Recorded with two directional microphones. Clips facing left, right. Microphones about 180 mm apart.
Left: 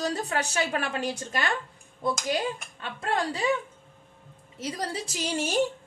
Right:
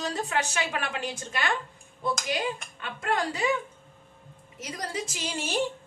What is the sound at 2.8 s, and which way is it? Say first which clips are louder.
Speech: even; 30° left (ahead or behind).